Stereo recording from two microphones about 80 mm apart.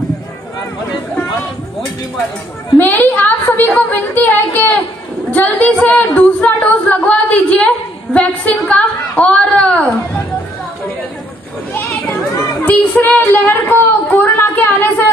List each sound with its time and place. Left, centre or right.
2.8 s a woman's voice: left
12.6 s speech: left